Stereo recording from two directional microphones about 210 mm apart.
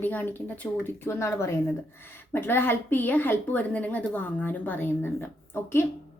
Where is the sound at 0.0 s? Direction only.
10° left (ahead or behind).